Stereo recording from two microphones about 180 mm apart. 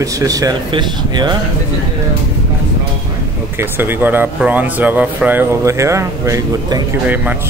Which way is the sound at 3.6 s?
10° right (ahead or behind).